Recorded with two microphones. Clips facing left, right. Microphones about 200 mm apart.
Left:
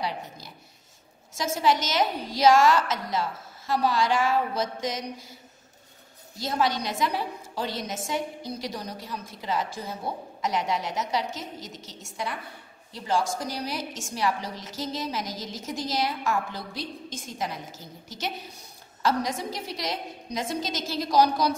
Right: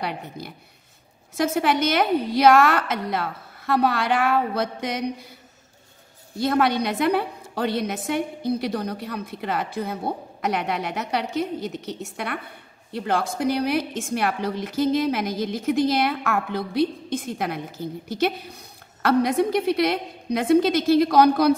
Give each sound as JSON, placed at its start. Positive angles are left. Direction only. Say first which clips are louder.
{"t": 0.0, "sound": "a woman's voice", "louder": "right 3 dB", "side_deg": -60}
{"t": 6.3, "sound": "a woman's voice", "louder": "right 6 dB", "side_deg": -60}